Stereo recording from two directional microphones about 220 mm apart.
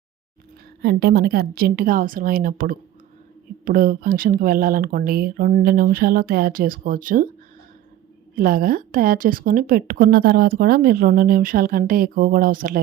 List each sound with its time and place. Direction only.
0.8 s a woman's voice: 45° right (ahead or behind)
8.4 s a woman's voice: 40° right (ahead or behind)